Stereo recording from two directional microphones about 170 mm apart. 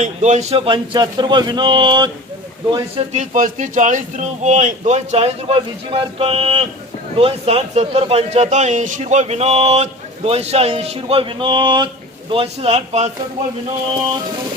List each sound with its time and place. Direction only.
0.0 s speech: 45° right (ahead or behind); by 3.0 s 25° right (ahead or behind)
3.1 s a man's voice: 50° right (ahead or behind)